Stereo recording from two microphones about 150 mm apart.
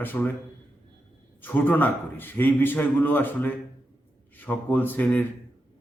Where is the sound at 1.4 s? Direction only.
10° left (ahead or behind).